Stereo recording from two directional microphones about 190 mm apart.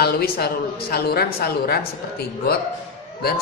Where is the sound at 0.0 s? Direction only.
55° left (ahead or behind).